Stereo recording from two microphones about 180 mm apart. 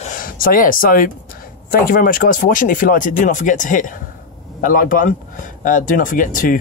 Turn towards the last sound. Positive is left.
turn(degrees=50)  # may be behind; listen again after turning